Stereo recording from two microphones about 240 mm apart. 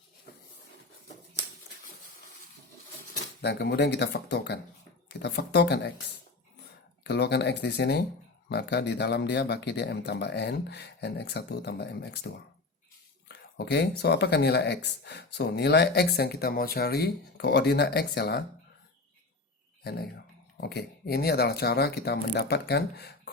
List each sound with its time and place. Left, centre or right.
3.4 s speech: left
7.0 s speech: left
19.8 s speech: left